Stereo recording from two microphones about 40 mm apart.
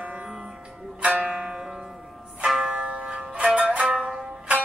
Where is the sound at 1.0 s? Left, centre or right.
Right.